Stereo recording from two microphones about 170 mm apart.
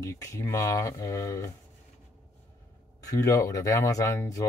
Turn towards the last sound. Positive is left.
turn(degrees=20)  # may be behind; listen again after turning